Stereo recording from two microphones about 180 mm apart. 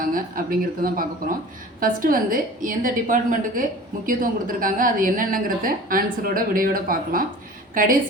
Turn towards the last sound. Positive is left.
turn(degrees=-50)  # may be behind; listen again after turning